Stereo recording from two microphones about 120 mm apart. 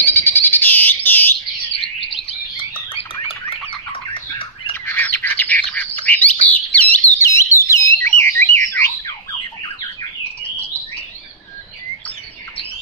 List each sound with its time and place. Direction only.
0.0 s bird: 15° left (ahead or behind)
2.0 s bird: 50° left (ahead or behind)
4.1 s squawk: 45° left (ahead or behind)
4.8 s bird: 20° left (ahead or behind)
7.2 s alarm: 25° left (ahead or behind)